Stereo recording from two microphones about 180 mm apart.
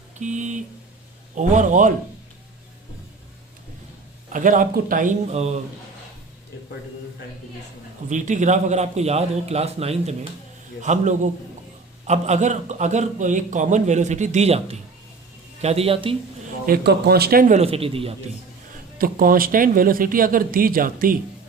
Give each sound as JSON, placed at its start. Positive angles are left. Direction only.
{"t": 0.2, "sound": "a man's voice", "side_deg": -40}
{"t": 4.3, "sound": "speech", "side_deg": -45}
{"t": 8.1, "sound": "a man's voice", "side_deg": -45}
{"t": 16.6, "sound": "speech", "side_deg": -60}
{"t": 17.6, "sound": "a man's voice", "side_deg": -30}
{"t": 18.9, "sound": "speech", "side_deg": -50}